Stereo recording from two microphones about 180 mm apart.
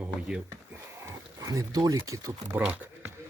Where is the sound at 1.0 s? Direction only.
20° right (ahead or behind).